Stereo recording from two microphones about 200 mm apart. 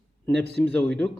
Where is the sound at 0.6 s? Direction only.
5° left (ahead or behind).